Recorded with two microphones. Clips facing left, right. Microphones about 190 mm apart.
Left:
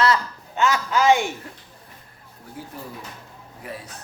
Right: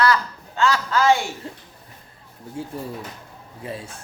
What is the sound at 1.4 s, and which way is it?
Speech, 25° right (ahead or behind).